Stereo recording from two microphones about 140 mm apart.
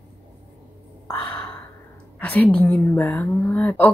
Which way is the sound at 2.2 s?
10° left (ahead or behind).